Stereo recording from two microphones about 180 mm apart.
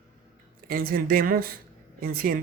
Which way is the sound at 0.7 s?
55° right (ahead or behind).